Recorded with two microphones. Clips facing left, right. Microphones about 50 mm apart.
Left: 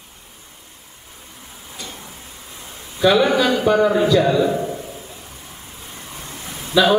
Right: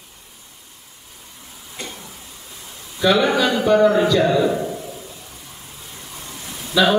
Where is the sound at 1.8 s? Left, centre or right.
Right.